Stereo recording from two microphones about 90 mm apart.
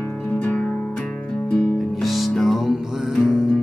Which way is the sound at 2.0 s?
Centre (ahead or behind).